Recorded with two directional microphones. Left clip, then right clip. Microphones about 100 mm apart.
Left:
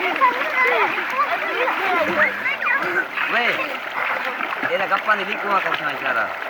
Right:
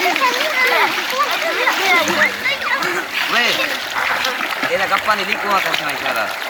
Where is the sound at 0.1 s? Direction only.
90° right.